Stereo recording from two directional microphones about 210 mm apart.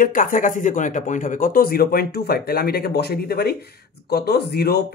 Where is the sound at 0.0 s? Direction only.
40° left (ahead or behind).